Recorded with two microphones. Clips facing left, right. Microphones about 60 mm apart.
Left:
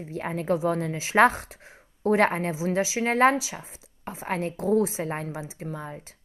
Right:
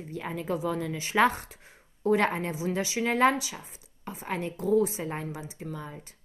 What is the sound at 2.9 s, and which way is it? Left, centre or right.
Speech, left.